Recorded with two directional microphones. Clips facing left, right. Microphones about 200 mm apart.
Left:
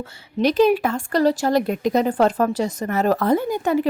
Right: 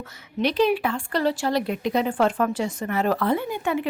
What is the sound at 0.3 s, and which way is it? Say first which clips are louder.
A woman's voice: left 5 dB; 45° left (ahead or behind).